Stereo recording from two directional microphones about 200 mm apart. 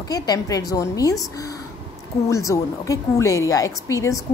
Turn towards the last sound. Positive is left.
turn(degrees=15)  # may be behind; listen again after turning